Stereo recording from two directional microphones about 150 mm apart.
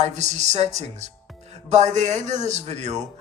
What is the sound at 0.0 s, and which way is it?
Speech, 50° right (ahead or behind).